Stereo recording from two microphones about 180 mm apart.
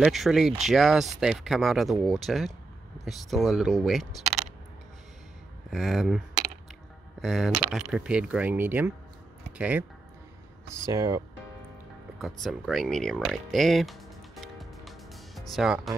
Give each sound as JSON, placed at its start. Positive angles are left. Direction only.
{"t": 0.0, "sound": "speech", "side_deg": 0}
{"t": 5.7, "sound": "speech", "side_deg": 0}
{"t": 12.2, "sound": "music", "side_deg": 0}
{"t": 15.5, "sound": "speech", "side_deg": 0}